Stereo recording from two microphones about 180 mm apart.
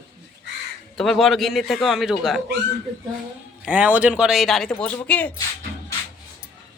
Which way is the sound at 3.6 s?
10° right (ahead or behind).